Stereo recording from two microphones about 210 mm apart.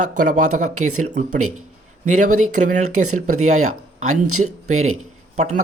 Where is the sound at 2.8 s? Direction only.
90° right.